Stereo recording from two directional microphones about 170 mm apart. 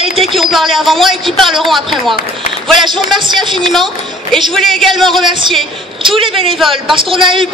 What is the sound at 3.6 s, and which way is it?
A man's voice, centre (ahead or behind).